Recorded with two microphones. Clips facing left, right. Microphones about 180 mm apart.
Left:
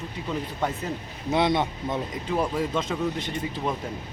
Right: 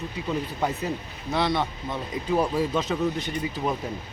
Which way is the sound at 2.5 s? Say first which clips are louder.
Right 2 dB; 5° right (ahead or behind).